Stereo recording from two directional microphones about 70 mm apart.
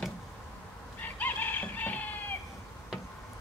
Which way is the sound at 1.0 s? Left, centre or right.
Left.